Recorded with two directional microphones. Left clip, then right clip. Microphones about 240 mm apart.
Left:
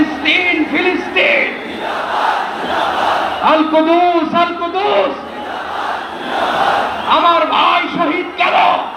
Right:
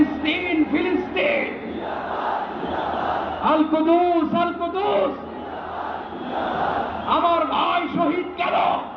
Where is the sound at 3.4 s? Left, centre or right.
Right.